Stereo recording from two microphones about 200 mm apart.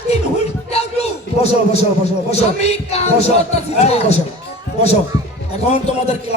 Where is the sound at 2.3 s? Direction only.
30° left (ahead or behind).